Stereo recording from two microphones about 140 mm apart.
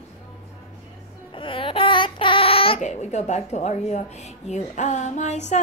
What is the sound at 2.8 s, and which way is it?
A woman's voice, 55° left (ahead or behind).